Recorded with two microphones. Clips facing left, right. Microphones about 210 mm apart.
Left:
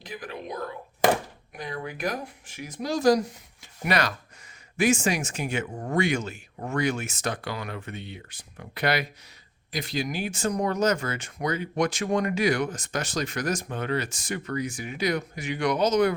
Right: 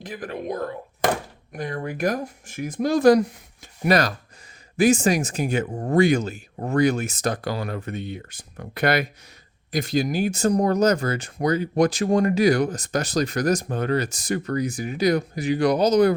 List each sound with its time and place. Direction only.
0.0 s speech: 50° right (ahead or behind)
3.8 s speech: 35° right (ahead or behind)